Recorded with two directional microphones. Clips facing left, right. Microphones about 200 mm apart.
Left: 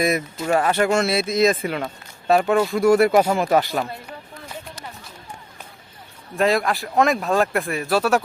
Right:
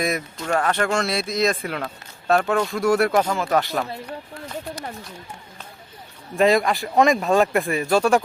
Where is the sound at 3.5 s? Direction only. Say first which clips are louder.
Left 2 dB; 5° left (ahead or behind).